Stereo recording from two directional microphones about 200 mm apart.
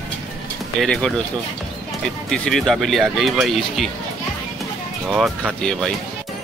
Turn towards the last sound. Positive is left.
turn(degrees=5)  # may be behind; listen again after turning